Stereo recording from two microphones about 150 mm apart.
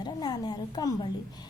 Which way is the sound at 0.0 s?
25° left (ahead or behind).